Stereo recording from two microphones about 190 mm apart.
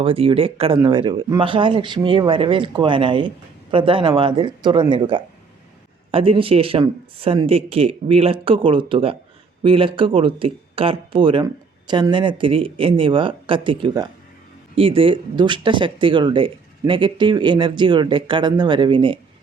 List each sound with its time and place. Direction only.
0.0 s speech: 30° right (ahead or behind)